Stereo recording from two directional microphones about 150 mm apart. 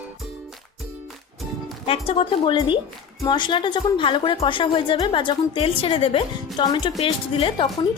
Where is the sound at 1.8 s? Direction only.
40° left (ahead or behind).